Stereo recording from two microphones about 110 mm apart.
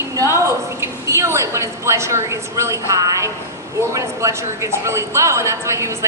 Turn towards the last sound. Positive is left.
turn(degrees=-25)  # may be behind; listen again after turning